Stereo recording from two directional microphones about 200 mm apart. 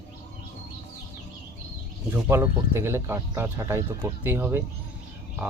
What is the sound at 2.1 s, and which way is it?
Speech, 10° right (ahead or behind).